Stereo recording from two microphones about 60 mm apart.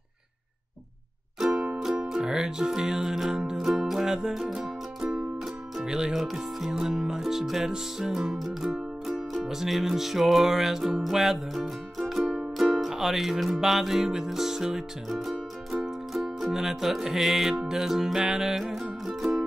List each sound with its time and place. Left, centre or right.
1.5 s music: right
1.8 s music: centre